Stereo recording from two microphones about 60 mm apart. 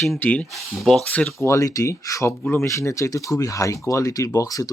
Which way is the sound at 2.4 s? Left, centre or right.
Left.